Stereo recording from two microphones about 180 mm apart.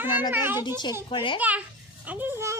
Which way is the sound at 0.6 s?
25° left (ahead or behind).